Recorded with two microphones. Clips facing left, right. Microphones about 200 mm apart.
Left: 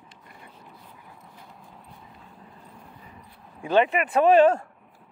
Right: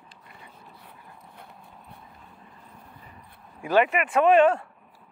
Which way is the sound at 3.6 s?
30° left (ahead or behind).